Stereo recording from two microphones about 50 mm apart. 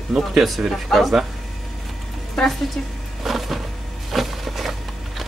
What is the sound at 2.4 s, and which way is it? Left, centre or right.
Speech, centre.